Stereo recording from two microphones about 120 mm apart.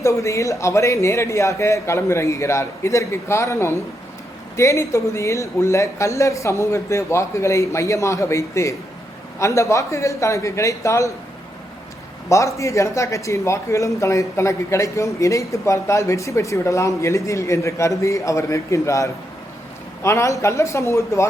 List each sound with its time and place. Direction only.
0.0 s speech: 25° left (ahead or behind)
12.3 s speech: 25° left (ahead or behind)